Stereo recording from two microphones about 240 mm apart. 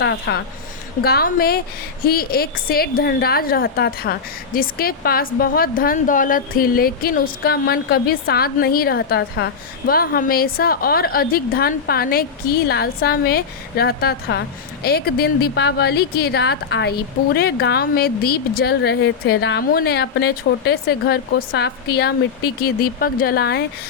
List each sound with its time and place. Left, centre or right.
0.0 s a woman's voice: left